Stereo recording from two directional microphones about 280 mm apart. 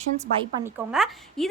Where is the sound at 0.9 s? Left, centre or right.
Centre.